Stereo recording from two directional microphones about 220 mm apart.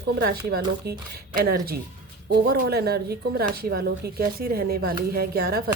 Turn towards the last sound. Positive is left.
turn(degrees=-45)  # may be behind; listen again after turning